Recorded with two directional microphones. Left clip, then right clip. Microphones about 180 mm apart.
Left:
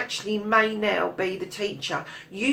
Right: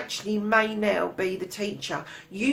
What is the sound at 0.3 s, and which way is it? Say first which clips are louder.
Speech: left 1 dB; 35° right (ahead or behind).